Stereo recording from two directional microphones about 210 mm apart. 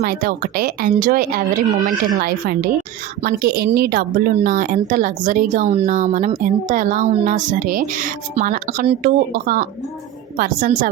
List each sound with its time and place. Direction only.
0.0 s a woman's voice: 45° right (ahead or behind)